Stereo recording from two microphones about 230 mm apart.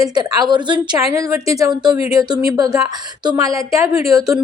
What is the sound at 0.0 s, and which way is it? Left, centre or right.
A woman's voice, centre.